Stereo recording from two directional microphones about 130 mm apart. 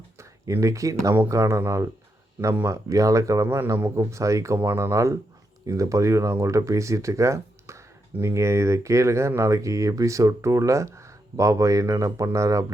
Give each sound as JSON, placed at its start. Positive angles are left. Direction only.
{"t": 0.2, "sound": "speech", "side_deg": -25}